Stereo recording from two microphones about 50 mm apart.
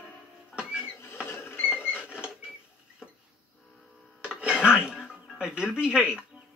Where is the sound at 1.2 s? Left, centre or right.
Left.